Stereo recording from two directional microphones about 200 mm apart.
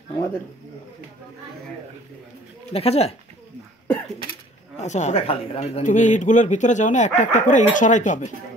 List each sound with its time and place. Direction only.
2.7 s speech: 30° left (ahead or behind)
4.7 s speech: 35° left (ahead or behind)